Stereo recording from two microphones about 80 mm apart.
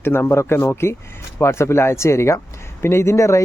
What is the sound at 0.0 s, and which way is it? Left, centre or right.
Speech, left.